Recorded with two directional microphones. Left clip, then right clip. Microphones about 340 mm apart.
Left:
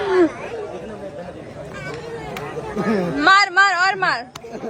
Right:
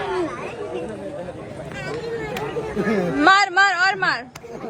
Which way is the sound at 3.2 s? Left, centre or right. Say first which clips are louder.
Left 2 dB; centre.